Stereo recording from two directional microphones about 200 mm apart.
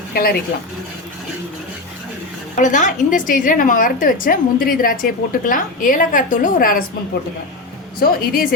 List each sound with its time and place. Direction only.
0.1 s speech: 50° left (ahead or behind)
2.6 s a woman's voice: 40° left (ahead or behind)
7.9 s a woman's voice: 45° left (ahead or behind)